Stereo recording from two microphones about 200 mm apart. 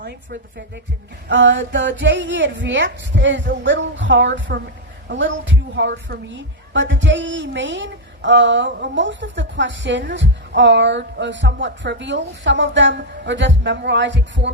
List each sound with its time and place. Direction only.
0.0 s a woman's voice: 55° right (ahead or behind)
1.3 s a woman's voice: 65° right (ahead or behind)